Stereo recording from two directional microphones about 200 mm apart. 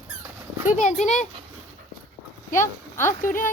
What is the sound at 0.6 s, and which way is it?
Speech, 40° left (ahead or behind).